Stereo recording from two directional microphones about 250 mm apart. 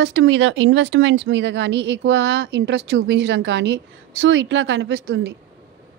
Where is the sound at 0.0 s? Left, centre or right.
Right.